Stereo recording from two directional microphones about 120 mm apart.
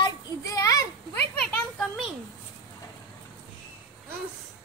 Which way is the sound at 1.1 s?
10° left (ahead or behind).